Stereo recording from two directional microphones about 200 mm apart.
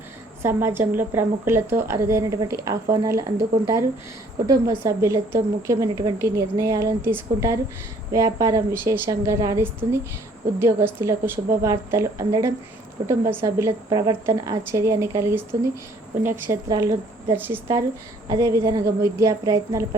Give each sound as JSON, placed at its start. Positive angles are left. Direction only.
{"t": 0.4, "sound": "a woman's voice", "side_deg": -10}